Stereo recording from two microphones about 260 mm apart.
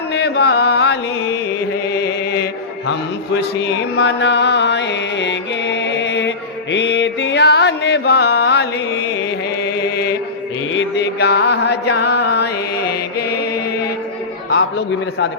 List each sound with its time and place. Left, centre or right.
0.1 s chant: left
1.9 s music: left
3.9 s music: left
10.7 s mantra: left
14.5 s a man's voice: left